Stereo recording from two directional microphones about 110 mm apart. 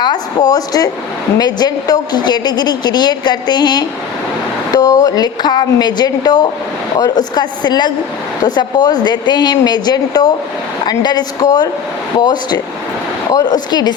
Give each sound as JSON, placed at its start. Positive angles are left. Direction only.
{"t": 0.0, "sound": "a woman's voice", "side_deg": 40}